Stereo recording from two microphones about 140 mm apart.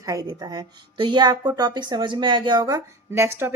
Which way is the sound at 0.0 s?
25° right (ahead or behind).